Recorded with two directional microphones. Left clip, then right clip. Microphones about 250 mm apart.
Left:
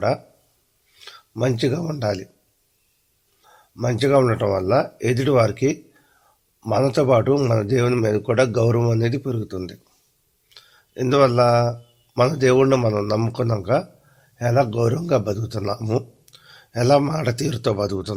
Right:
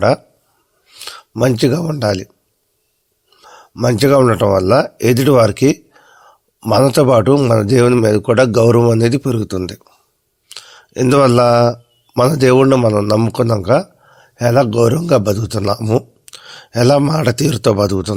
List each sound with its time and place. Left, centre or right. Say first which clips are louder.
0.9 s speech: right 11 dB; right
3.4 s a man's voice: right 9 dB; right